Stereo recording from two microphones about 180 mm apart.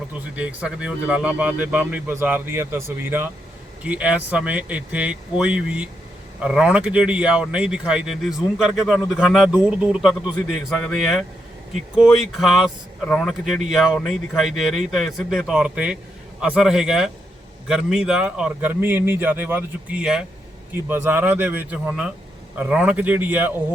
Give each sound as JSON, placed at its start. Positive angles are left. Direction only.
{"t": 0.1, "sound": "speech", "side_deg": -5}